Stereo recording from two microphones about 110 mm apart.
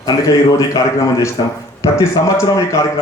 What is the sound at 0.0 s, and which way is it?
A man's voice, 30° left (ahead or behind).